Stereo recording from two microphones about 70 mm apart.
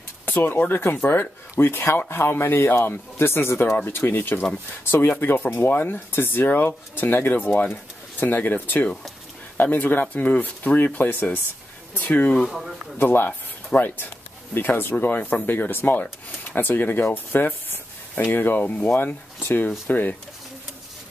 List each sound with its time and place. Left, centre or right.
0.2 s speech: left
12.4 s speech: centre
13.0 s speech: left